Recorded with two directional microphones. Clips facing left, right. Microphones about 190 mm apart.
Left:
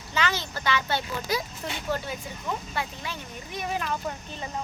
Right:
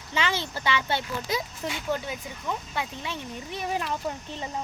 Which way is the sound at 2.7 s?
25° right (ahead or behind).